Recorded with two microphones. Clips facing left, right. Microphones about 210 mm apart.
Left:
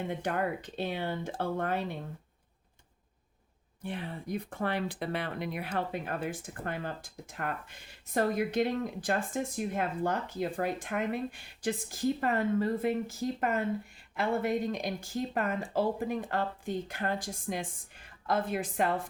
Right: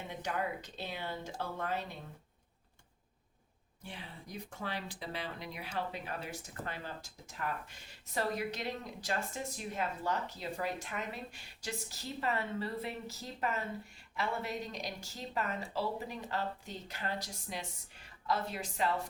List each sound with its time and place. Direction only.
0.0 s speech: 55° left (ahead or behind)
3.8 s speech: 55° left (ahead or behind)